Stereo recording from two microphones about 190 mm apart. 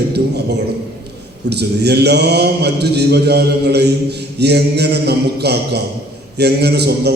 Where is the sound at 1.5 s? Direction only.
60° right (ahead or behind).